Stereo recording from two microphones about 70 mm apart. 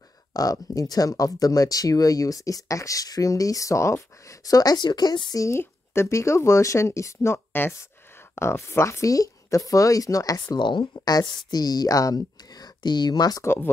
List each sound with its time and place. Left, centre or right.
0.3 s speech: left
5.6 s speech: left
13.4 s speech: left